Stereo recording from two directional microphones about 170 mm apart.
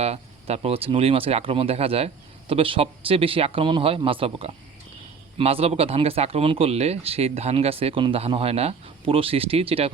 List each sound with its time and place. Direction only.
0.0 s speech: 35° right (ahead or behind)